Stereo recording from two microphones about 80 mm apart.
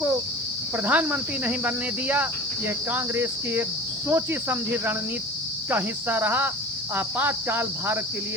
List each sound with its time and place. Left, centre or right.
0.9 s speech: centre